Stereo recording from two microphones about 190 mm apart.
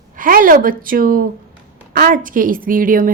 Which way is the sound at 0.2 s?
45° right (ahead or behind).